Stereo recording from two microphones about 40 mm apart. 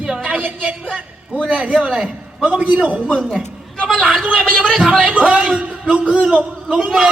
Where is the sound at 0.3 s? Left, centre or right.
Right.